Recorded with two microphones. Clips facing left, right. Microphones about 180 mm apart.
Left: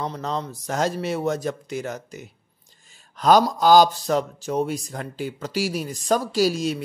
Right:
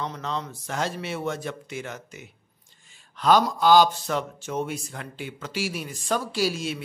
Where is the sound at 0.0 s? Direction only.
35° left (ahead or behind).